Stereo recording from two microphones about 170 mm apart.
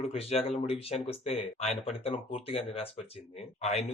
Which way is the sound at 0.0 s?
35° left (ahead or behind).